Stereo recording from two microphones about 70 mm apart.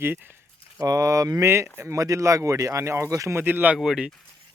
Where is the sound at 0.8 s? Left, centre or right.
Right.